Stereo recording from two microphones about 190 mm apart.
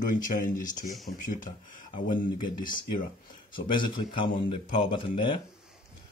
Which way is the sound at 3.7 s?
25° left (ahead or behind).